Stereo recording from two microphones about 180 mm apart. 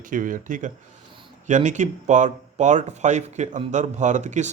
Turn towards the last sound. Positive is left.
turn(degrees=-40)  # may be behind; listen again after turning